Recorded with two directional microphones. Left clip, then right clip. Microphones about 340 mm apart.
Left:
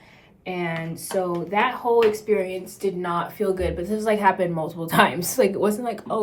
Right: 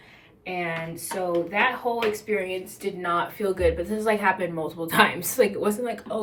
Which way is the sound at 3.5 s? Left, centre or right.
Centre.